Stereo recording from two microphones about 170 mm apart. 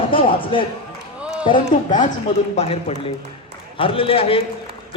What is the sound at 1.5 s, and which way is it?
Speech, 50° left (ahead or behind).